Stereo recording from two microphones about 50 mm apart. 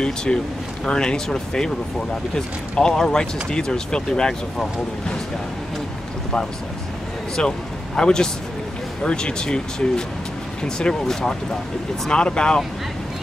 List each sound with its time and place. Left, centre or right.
0.0 s speech: centre
7.3 s speech: centre